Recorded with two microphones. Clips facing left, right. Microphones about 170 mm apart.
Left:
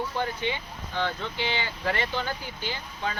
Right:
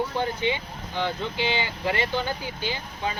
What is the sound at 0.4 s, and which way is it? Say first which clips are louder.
Speech: right 4 dB; 15° right (ahead or behind).